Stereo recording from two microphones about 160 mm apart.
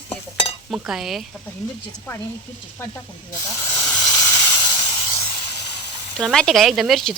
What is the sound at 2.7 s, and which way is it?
Speech, 15° left (ahead or behind).